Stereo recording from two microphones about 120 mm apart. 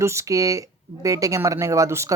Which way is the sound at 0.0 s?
25° right (ahead or behind).